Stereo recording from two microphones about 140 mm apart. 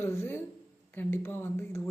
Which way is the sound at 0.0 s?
15° left (ahead or behind).